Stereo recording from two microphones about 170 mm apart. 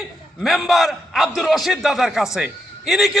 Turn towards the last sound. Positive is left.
turn(degrees=0)  # may be behind; listen again after turning